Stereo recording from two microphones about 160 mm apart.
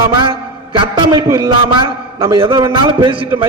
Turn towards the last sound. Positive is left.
turn(degrees=-30)  # may be behind; listen again after turning